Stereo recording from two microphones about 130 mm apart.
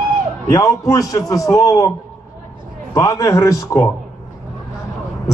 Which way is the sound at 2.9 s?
25° left (ahead or behind).